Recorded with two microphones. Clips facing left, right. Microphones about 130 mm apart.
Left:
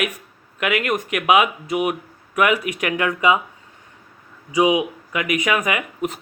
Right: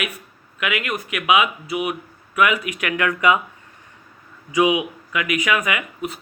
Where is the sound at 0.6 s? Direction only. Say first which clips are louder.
Left 4 dB; 45° left (ahead or behind); by 3.3 s 25° left (ahead or behind).